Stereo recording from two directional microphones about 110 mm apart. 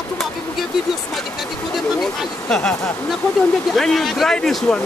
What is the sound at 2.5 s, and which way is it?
Speech, 5° left (ahead or behind).